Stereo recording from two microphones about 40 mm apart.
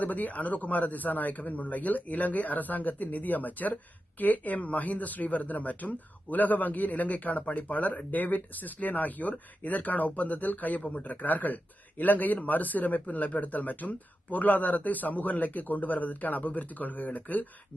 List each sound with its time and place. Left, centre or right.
0.0 s speech: left
10.8 s a man's voice: left
11.0 s speech: left